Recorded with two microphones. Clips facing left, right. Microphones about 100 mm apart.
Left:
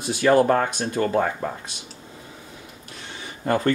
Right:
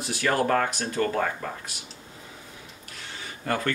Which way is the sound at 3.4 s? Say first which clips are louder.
Left 6 dB; 30° left (ahead or behind).